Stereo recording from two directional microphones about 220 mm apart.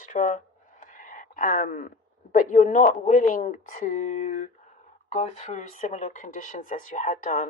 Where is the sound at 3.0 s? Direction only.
35° left (ahead or behind).